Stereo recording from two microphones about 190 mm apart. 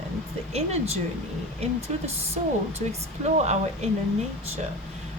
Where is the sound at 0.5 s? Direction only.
35° right (ahead or behind).